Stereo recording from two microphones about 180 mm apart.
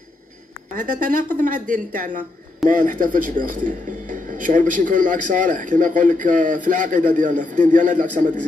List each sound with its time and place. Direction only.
0.7 s a man's voice: 45° right (ahead or behind)